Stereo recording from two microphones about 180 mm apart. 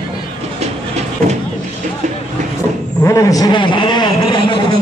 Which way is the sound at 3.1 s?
20° left (ahead or behind).